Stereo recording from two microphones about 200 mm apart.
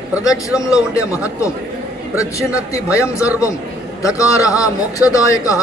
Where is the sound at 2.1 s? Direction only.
15° left (ahead or behind).